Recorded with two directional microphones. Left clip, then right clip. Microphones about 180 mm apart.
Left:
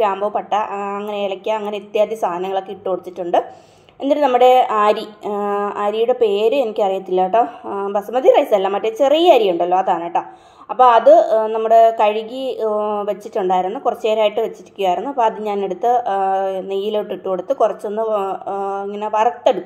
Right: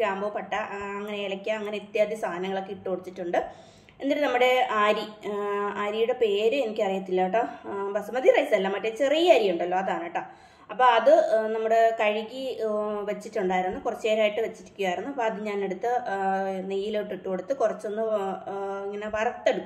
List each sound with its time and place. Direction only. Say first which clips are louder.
0.0 s a woman's voice: left 10 dB; 30° left (ahead or behind)